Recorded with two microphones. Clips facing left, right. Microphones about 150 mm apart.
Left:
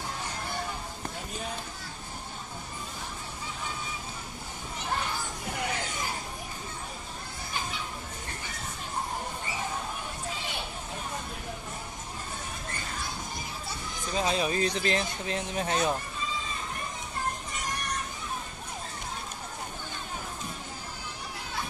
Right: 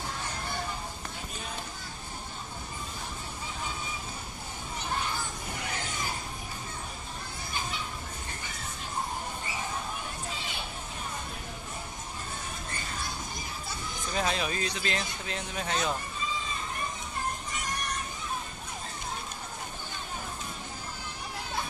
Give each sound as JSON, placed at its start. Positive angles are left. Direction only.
{"t": 14.1, "sound": "speech", "side_deg": 30}